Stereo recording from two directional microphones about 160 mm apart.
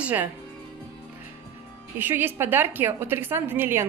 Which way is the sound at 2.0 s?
10° right (ahead or behind).